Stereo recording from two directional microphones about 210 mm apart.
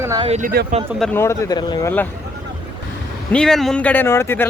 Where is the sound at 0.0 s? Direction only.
15° right (ahead or behind).